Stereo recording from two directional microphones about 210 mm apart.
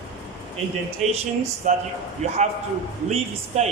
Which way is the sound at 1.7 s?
40° right (ahead or behind).